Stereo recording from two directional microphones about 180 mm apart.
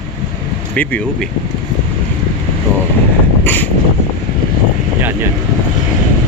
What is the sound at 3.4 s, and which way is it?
Vehicle, 10° left (ahead or behind).